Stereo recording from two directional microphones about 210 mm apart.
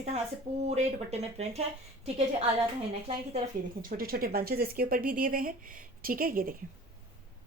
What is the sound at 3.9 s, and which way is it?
Speech, 45° right (ahead or behind).